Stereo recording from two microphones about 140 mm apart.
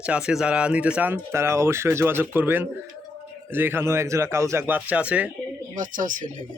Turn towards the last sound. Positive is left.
turn(degrees=-70)  # may be behind; listen again after turning